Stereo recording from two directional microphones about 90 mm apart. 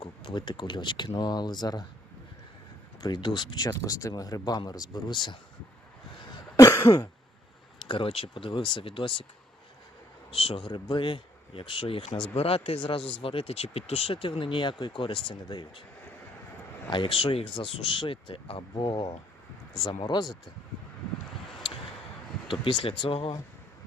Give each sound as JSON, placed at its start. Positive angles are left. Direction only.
{"t": 0.0, "sound": "speech", "side_deg": 65}
{"t": 3.0, "sound": "speech", "side_deg": 55}
{"t": 3.7, "sound": "speech", "side_deg": 40}
{"t": 6.6, "sound": "throat clearing", "side_deg": 35}
{"t": 7.9, "sound": "speech", "side_deg": 80}
{"t": 10.3, "sound": "speech", "side_deg": 85}
{"t": 15.4, "sound": "speech", "side_deg": 60}
{"t": 16.9, "sound": "speech", "side_deg": 75}
{"t": 18.7, "sound": "speech", "side_deg": 55}
{"t": 22.4, "sound": "speech", "side_deg": 70}